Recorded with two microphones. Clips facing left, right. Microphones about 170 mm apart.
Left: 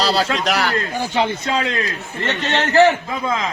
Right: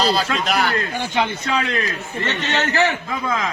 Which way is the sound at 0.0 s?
75° left (ahead or behind).